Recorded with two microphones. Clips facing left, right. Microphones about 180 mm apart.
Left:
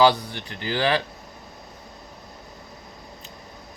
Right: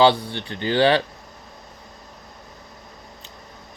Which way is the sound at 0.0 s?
30° right (ahead or behind).